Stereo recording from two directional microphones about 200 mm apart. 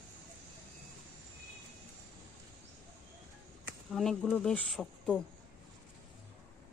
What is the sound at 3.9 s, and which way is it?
Speech, centre (ahead or behind).